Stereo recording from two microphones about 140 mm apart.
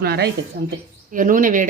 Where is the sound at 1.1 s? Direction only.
70° right (ahead or behind).